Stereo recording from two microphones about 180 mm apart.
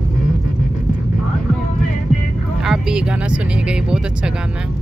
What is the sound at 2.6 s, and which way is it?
Speech, 5° right (ahead or behind).